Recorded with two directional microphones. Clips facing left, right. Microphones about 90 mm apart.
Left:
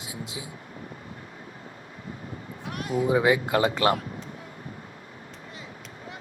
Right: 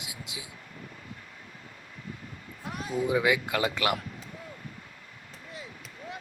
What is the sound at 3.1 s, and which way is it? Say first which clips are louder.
Speech: left 5 dB; 35° left (ahead or behind).